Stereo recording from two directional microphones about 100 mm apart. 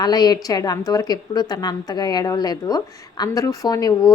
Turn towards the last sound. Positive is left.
turn(degrees=40)  # may be behind; listen again after turning